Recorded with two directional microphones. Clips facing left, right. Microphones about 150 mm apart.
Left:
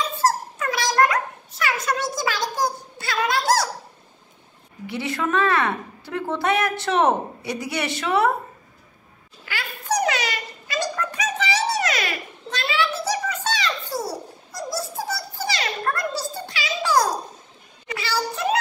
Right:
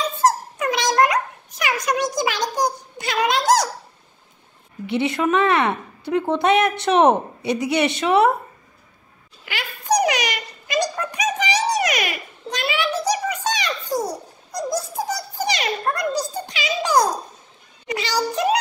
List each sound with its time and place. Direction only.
0.2 s dog: 20° right (ahead or behind)
4.8 s a woman's voice: 20° right (ahead or behind)
9.5 s a sound: 15° right (ahead or behind)